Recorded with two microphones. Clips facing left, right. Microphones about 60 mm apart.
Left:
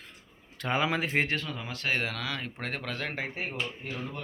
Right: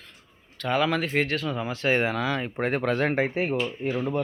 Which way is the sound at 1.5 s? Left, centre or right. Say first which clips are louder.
Right 7 dB; centre.